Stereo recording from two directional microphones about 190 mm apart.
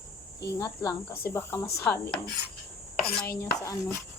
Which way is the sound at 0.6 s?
20° left (ahead or behind).